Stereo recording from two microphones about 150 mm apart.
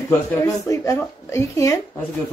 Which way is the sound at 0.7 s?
20° left (ahead or behind).